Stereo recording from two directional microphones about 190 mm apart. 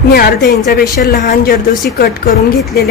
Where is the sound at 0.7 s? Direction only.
55° left (ahead or behind).